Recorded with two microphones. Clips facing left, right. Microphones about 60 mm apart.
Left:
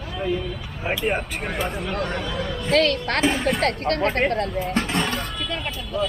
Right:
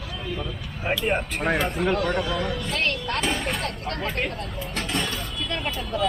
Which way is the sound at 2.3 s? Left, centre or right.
Right.